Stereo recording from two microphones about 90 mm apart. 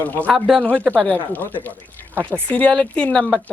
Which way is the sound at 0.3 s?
Centre (ahead or behind).